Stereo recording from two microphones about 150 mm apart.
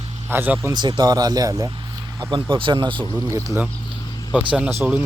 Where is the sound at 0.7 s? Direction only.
30° right (ahead or behind).